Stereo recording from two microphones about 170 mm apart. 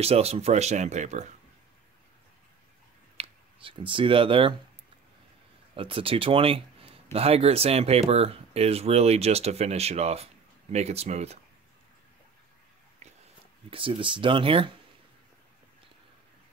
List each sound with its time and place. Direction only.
0.0 s speech: 35° right (ahead or behind)
3.2 s speech: 30° right (ahead or behind)
5.8 s speech: 30° right (ahead or behind)
13.7 s speech: 30° right (ahead or behind)